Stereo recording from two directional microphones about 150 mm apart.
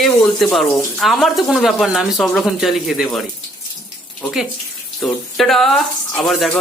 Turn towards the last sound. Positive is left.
turn(degrees=0)  # may be behind; listen again after turning